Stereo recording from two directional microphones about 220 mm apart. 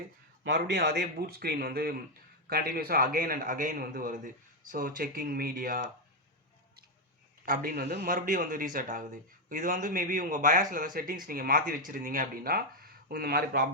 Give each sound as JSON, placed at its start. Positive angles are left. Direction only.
{"t": 0.4, "sound": "a man's voice", "side_deg": -55}
{"t": 7.4, "sound": "a man's voice", "side_deg": -40}